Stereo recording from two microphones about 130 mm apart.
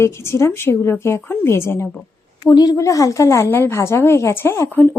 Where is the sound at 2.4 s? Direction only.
30° left (ahead or behind).